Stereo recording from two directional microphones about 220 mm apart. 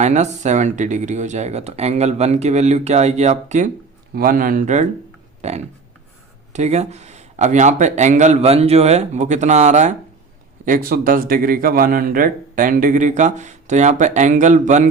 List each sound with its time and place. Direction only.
0.0 s speech: 30° right (ahead or behind)
5.4 s a sound: 30° right (ahead or behind)
6.5 s speech: 30° right (ahead or behind)